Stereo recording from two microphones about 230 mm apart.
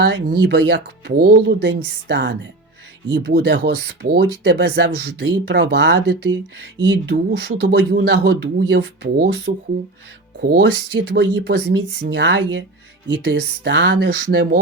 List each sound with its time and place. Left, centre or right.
0.0 s speech: right